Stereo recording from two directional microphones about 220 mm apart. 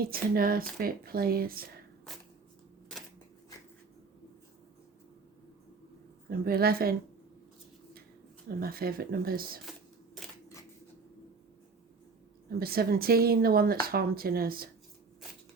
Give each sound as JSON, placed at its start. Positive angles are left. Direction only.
{"t": 0.0, "sound": "speech", "side_deg": -40}
{"t": 6.4, "sound": "speech", "side_deg": -45}
{"t": 8.4, "sound": "speech", "side_deg": -45}
{"t": 12.5, "sound": "speech", "side_deg": -45}